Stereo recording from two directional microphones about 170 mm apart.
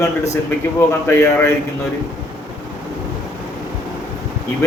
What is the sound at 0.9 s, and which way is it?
Speech, 15° left (ahead or behind).